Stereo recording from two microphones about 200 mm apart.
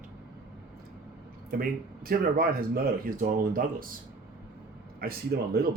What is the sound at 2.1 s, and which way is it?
Speech, 50° right (ahead or behind).